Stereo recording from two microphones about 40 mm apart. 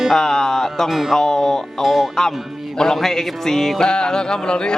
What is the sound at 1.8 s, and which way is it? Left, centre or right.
Speech, centre.